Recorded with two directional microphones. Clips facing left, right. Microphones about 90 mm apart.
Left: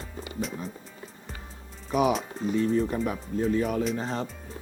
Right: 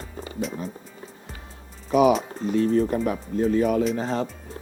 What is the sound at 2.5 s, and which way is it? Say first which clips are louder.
Speech: right 4 dB; 75° right (ahead or behind).